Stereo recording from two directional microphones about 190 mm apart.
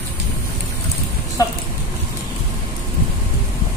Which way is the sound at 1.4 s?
15° left (ahead or behind).